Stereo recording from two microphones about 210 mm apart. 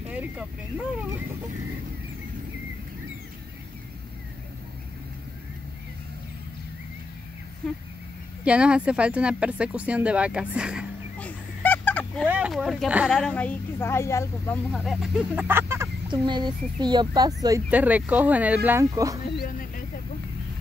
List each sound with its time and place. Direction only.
0.1 s speech: 5° right (ahead or behind)
8.5 s speech: 5° right (ahead or behind)
11.1 s a sound: 10° left (ahead or behind)
12.3 s speech: 5° right (ahead or behind); by 14.6 s 15° left (ahead or behind)
14.7 s speech: centre (ahead or behind); by 17.3 s 20° right (ahead or behind)
17.6 s speech: 5° right (ahead or behind)
19.3 s music: 40° left (ahead or behind)